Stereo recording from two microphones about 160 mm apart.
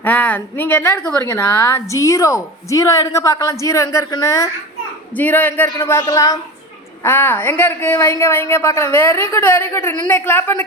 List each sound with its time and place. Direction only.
0.0 s a woman's voice: 10° left (ahead or behind)